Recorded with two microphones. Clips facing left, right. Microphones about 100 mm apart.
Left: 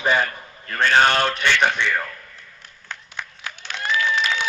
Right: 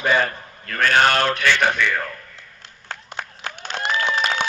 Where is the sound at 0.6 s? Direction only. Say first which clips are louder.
Even; 25° left (ahead or behind).